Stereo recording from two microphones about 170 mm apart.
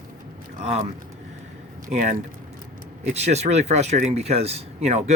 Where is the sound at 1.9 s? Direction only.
45° right (ahead or behind).